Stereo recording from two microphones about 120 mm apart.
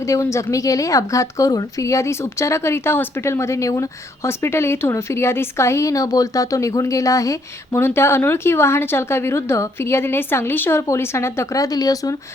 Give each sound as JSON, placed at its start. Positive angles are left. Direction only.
{"t": 0.0, "sound": "a woman's voice", "side_deg": 25}